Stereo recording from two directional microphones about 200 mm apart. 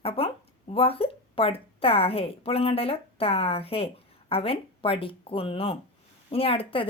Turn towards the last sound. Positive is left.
turn(degrees=25)  # may be behind; listen again after turning